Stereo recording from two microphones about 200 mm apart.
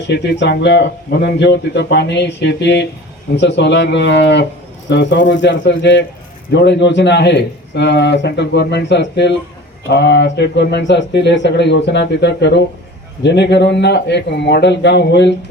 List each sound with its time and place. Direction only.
0.1 s speech: 60° left (ahead or behind)